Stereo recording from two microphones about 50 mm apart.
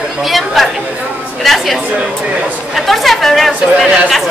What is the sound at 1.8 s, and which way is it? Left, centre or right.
Speech, right.